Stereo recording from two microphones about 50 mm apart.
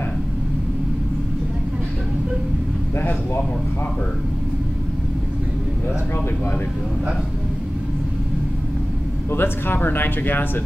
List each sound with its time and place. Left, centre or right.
9.3 s speech: left